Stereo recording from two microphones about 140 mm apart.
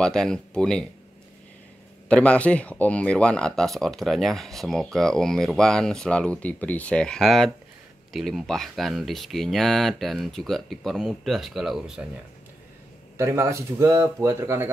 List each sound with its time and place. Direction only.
0.0 s speech: 5° left (ahead or behind)
2.0 s speech: 10° left (ahead or behind)
13.2 s speech: 20° right (ahead or behind)